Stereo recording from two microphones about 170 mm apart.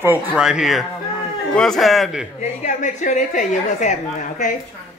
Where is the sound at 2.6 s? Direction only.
45° left (ahead or behind).